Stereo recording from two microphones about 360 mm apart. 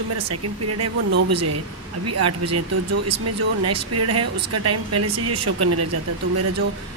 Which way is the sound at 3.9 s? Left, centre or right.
Right.